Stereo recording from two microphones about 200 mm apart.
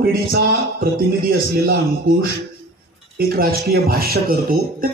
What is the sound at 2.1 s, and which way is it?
Speech, 45° right (ahead or behind).